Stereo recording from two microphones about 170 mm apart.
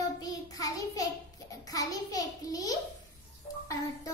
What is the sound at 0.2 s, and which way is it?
Child singing, 20° left (ahead or behind).